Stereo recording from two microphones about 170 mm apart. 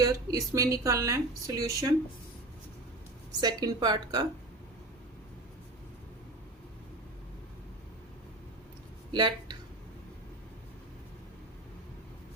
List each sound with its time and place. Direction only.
0.0 s a woman's voice: 20° right (ahead or behind)
3.4 s a woman's voice: 25° right (ahead or behind)
9.1 s speech: 25° right (ahead or behind)